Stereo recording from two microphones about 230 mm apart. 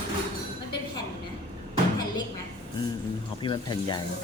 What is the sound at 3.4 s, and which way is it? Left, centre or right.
Speech, left.